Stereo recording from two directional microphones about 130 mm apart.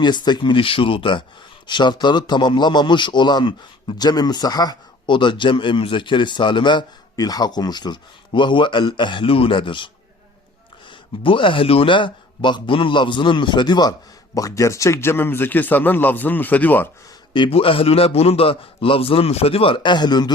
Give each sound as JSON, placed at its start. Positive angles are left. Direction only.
{"t": 0.0, "sound": "a man's voice", "side_deg": 35}
{"t": 11.2, "sound": "a man's voice", "side_deg": 40}
{"t": 17.3, "sound": "a man's voice", "side_deg": 45}